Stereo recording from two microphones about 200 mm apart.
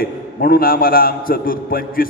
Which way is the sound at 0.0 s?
45° left (ahead or behind).